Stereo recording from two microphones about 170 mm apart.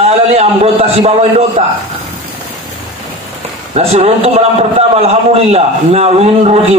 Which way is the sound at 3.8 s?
35° right (ahead or behind).